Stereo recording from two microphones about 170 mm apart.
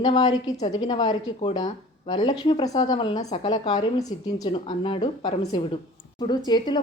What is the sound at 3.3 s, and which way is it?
Speech, 35° left (ahead or behind).